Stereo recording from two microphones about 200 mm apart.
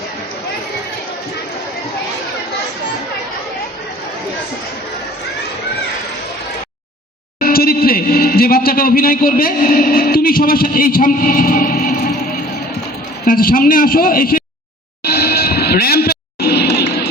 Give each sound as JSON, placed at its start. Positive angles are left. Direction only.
{"t": 7.3, "sound": "speech", "side_deg": 45}
{"t": 13.2, "sound": "a man's voice", "side_deg": 45}
{"t": 15.0, "sound": "music", "side_deg": 50}